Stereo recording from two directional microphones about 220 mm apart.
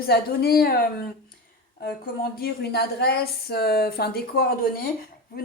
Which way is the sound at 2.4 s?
45° left (ahead or behind).